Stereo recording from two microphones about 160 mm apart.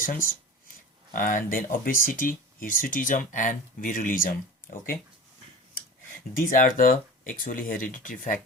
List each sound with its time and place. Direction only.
0.0 s speech: 60° left (ahead or behind)
6.4 s speech: 60° left (ahead or behind)